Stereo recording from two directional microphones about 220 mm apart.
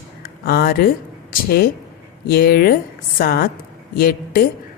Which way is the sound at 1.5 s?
45° left (ahead or behind).